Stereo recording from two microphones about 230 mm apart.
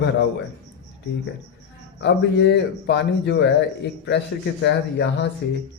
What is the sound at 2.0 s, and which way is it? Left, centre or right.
A man's voice, left.